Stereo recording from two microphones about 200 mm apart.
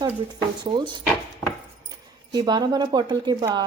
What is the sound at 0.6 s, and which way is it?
Speech, 25° right (ahead or behind).